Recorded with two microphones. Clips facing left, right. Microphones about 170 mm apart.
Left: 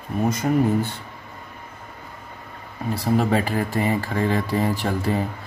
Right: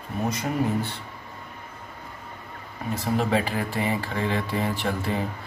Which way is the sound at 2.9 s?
40° left (ahead or behind).